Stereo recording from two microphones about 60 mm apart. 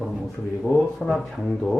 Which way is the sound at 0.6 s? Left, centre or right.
Centre.